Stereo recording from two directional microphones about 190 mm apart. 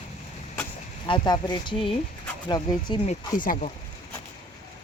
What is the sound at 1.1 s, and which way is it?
Speech, 25° left (ahead or behind).